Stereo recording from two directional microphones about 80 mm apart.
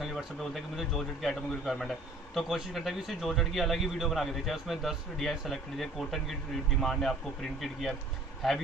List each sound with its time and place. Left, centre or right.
0.0 s a man's voice: centre
8.4 s a man's voice: centre